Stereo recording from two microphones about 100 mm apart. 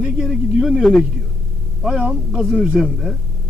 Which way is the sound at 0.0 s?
5° right (ahead or behind).